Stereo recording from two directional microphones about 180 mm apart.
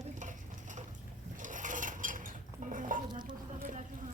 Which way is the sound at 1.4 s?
45° right (ahead or behind).